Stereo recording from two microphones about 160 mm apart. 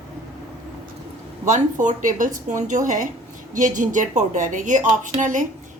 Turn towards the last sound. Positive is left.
turn(degrees=-50)  # may be behind; listen again after turning